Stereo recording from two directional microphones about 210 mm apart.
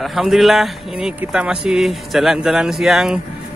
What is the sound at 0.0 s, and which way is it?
Speech, centre (ahead or behind).